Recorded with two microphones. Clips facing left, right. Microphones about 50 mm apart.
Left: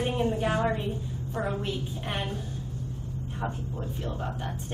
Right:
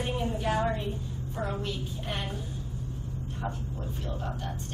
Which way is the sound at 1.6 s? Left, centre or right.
Centre.